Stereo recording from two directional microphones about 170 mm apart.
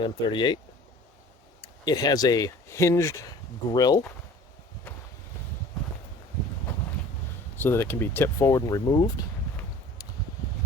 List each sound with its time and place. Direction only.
0.0 s speech: 30° left (ahead or behind)
1.8 s speech: 25° left (ahead or behind)
7.5 s speech: 15° left (ahead or behind)